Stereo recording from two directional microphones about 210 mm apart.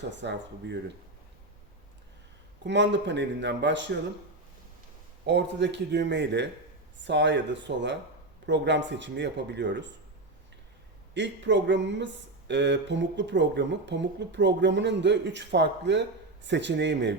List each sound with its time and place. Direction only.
0.1 s speech: 55° right (ahead or behind)
2.6 s speech: 55° right (ahead or behind)
5.2 s speech: 55° right (ahead or behind)
11.1 s speech: 60° right (ahead or behind)